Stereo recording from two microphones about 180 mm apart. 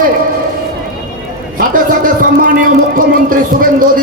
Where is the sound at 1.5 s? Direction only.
50° right (ahead or behind).